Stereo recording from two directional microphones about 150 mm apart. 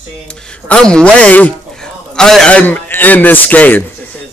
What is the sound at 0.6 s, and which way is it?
A man's voice, 5° left (ahead or behind).